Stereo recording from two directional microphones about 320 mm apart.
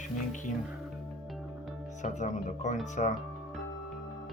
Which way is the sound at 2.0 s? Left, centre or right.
Left.